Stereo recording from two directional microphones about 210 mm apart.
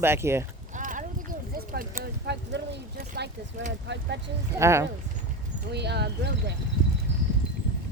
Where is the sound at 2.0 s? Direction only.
55° right (ahead or behind).